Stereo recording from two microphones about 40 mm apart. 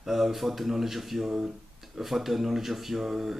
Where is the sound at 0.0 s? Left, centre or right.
Centre.